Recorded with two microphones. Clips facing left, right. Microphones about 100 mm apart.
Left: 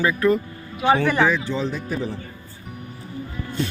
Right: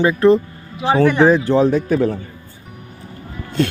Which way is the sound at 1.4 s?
55° right (ahead or behind).